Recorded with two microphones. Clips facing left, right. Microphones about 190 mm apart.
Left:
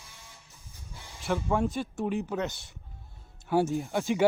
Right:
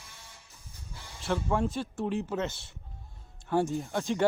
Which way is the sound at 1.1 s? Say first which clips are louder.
Left 1 dB; centre (ahead or behind).